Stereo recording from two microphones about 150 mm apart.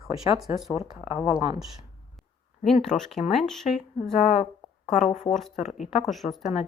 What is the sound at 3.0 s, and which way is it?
Speech, centre (ahead or behind).